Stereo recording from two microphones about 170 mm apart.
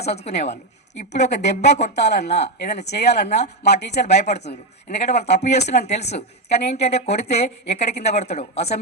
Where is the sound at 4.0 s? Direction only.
40° left (ahead or behind).